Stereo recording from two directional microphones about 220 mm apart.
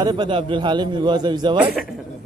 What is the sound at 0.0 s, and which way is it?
A man's voice, 20° right (ahead or behind).